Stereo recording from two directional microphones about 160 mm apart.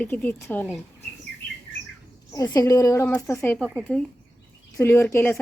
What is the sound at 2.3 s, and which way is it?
A woman's voice, 20° left (ahead or behind).